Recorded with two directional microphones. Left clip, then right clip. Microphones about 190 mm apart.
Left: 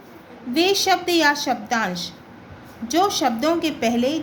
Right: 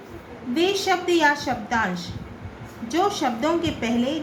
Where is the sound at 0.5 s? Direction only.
60° left (ahead or behind).